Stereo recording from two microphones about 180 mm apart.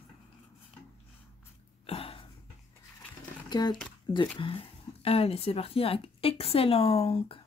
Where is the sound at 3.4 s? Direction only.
20° left (ahead or behind).